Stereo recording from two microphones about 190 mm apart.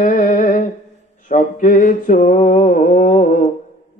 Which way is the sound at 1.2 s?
45° left (ahead or behind).